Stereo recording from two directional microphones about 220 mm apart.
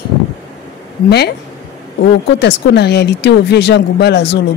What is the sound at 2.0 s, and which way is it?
Speech, 50° left (ahead or behind).